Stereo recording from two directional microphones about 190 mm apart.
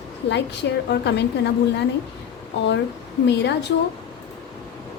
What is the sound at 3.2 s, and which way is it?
Speech, 65° left (ahead or behind).